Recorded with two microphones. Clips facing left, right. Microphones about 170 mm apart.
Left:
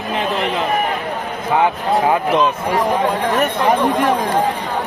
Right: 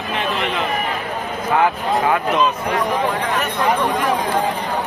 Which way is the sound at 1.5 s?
25° left (ahead or behind).